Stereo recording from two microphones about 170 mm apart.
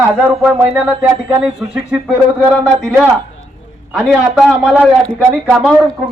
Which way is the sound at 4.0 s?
5° right (ahead or behind).